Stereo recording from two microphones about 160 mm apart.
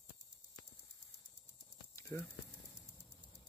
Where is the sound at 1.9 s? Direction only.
20° left (ahead or behind).